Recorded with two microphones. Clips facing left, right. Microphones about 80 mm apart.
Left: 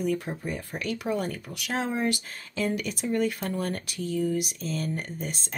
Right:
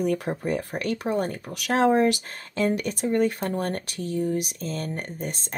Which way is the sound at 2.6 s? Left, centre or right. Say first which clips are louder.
Right 4 dB; right.